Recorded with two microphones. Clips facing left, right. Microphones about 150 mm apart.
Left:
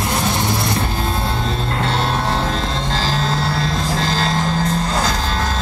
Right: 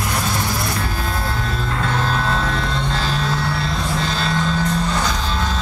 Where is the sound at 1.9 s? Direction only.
25° left (ahead or behind).